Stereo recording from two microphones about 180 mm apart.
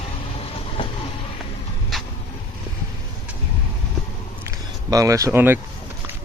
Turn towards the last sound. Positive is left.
turn(degrees=-10)  # may be behind; listen again after turning